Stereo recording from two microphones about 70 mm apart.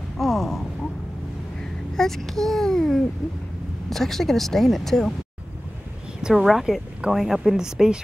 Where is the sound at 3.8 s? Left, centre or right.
Centre.